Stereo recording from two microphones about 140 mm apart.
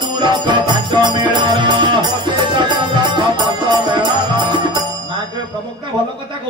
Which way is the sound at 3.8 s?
35° right (ahead or behind).